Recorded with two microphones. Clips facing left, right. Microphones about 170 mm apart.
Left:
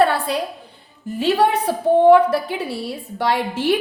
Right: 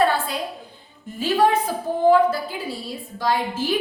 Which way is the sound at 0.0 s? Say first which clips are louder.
Left 3 dB; 70° left (ahead or behind).